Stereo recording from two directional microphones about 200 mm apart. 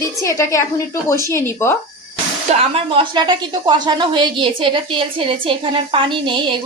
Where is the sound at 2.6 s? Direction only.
25° right (ahead or behind).